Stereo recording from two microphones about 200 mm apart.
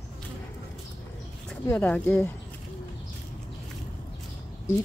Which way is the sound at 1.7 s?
5° left (ahead or behind).